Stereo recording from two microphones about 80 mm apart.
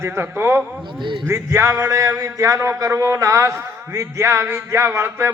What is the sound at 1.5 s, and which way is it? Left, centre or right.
A man's voice, right.